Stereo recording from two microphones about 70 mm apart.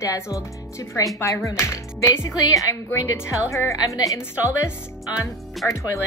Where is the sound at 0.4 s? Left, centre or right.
Left.